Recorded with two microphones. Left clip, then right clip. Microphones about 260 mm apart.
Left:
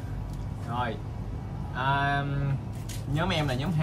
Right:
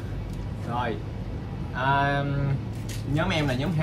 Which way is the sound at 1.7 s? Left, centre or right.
Centre.